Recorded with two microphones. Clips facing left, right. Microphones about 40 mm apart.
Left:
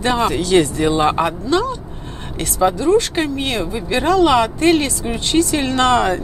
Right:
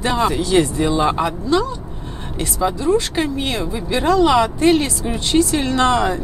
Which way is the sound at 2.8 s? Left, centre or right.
Left.